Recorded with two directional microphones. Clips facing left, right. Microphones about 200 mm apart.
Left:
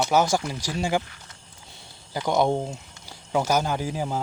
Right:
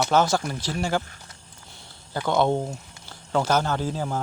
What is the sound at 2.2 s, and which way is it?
Speech, 15° left (ahead or behind).